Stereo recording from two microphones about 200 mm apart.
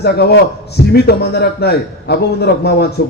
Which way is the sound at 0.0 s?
55° left (ahead or behind).